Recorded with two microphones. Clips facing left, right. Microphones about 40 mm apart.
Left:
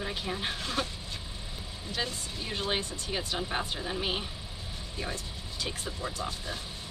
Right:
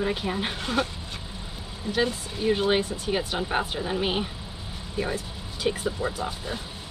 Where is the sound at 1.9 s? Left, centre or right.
Centre.